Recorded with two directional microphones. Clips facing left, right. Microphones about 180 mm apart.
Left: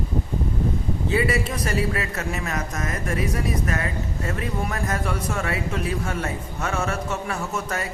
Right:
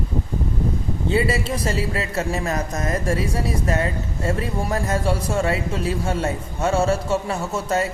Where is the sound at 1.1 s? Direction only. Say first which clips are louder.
Right 2 dB; 30° right (ahead or behind).